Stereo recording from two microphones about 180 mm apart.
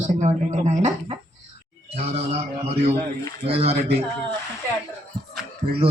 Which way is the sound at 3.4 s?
35° right (ahead or behind).